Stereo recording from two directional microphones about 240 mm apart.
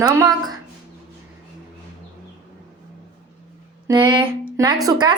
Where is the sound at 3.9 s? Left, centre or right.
Centre.